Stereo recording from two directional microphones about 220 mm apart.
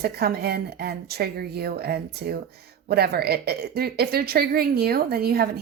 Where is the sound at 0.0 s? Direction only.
45° right (ahead or behind).